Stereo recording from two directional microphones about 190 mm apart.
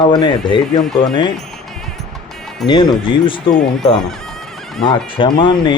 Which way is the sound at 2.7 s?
25° left (ahead or behind).